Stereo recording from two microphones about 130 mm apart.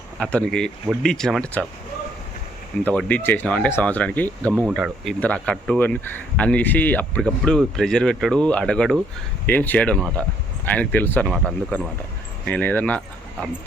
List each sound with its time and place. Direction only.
0.2 s speech: 10° left (ahead or behind)
2.8 s speech: 10° left (ahead or behind)
11.3 s speech: 5° left (ahead or behind)
12.5 s speech: 15° left (ahead or behind)